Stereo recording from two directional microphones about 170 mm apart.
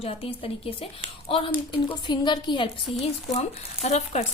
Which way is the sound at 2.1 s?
25° left (ahead or behind).